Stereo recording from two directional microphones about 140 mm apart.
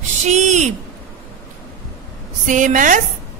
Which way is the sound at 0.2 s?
55° right (ahead or behind).